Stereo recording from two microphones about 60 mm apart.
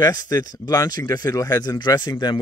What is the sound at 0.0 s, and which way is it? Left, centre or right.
Speech, left.